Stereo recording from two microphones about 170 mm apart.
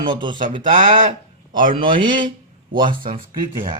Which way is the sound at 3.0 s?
55° right (ahead or behind).